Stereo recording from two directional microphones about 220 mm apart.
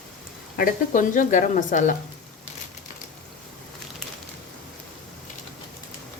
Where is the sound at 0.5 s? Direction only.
40° left (ahead or behind).